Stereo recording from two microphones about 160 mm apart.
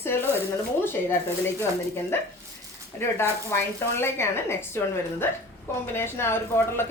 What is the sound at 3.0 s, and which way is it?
A woman's voice, 15° left (ahead or behind).